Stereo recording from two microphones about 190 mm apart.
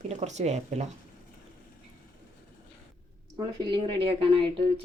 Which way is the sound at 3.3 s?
20° right (ahead or behind).